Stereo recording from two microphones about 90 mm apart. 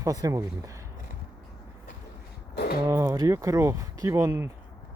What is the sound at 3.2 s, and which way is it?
Speech, 40° right (ahead or behind).